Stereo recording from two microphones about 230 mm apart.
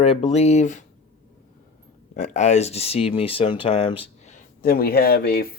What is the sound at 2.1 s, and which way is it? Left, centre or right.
Speech, left.